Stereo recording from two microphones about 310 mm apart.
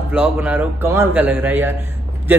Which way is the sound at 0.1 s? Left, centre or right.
Centre.